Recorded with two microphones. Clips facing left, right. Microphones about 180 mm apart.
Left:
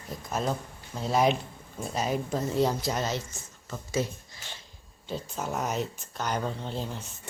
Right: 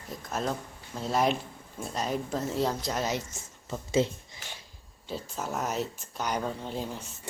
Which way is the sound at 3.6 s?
25° right (ahead or behind).